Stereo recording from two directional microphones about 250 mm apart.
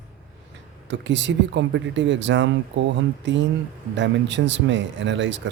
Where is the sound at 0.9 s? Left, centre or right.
Right.